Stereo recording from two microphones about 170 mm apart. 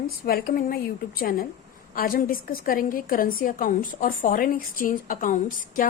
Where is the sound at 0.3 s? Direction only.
60° left (ahead or behind).